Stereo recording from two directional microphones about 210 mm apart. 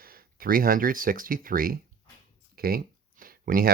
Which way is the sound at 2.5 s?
45° right (ahead or behind).